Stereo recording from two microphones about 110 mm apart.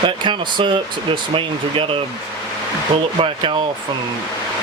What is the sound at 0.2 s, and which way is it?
Speech, 45° right (ahead or behind).